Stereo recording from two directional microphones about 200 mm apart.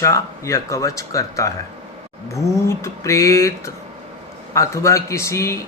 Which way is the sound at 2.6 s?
15° left (ahead or behind).